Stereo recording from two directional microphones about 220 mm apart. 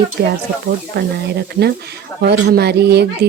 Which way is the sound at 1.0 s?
50° right (ahead or behind).